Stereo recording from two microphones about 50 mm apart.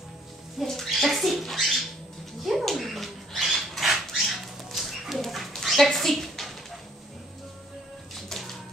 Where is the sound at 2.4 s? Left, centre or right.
Centre.